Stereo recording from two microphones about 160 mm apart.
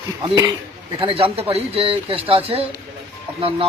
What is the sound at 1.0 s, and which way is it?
Speech, 35° right (ahead or behind).